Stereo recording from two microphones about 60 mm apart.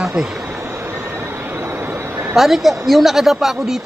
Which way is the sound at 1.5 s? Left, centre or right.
Right.